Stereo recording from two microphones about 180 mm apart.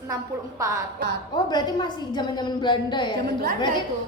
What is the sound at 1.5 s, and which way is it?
A woman's voice, 25° left (ahead or behind).